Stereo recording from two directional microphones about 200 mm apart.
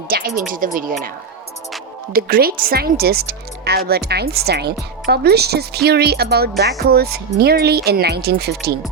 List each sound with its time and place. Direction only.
0.1 s speech: 50° right (ahead or behind)
2.1 s speech: 45° right (ahead or behind)